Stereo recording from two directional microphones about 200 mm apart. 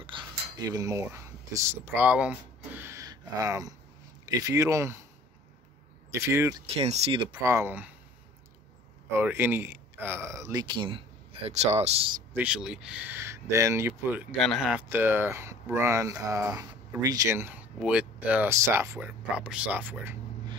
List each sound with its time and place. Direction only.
0.0 s cutlery: 20° right (ahead or behind)
4.4 s speech: 15° right (ahead or behind)
6.1 s speech: 15° right (ahead or behind)
6.8 s speech: 30° right (ahead or behind)
7.4 s speech: 10° right (ahead or behind)
9.2 s speech: 10° right (ahead or behind); by 11.9 s 35° right (ahead or behind)
12.4 s speech: 5° right (ahead or behind)
14.4 s speech: centre (ahead or behind)